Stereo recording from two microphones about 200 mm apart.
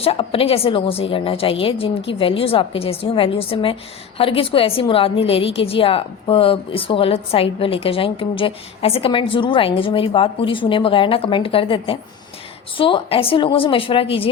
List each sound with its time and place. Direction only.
0.0 s a woman's voice: 30° left (ahead or behind)